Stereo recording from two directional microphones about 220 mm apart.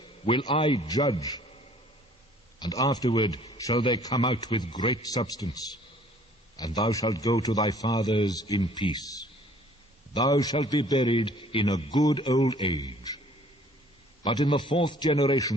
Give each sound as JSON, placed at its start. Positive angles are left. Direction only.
{"t": 0.0, "sound": "a man's voice", "side_deg": 20}
{"t": 2.6, "sound": "a man's voice", "side_deg": 15}
{"t": 14.3, "sound": "a man's voice", "side_deg": 20}